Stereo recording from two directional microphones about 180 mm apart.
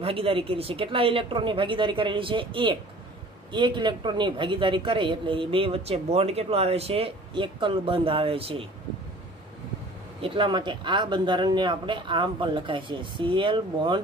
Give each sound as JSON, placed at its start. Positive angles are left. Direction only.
{"t": 0.0, "sound": "a man's voice", "side_deg": -30}
{"t": 10.2, "sound": "a man's voice", "side_deg": -30}